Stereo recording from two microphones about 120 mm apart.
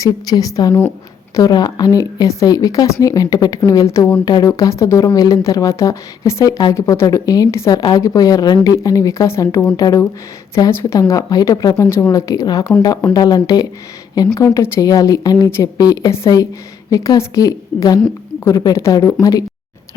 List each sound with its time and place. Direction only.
0.0 s a woman's voice: 30° left (ahead or behind)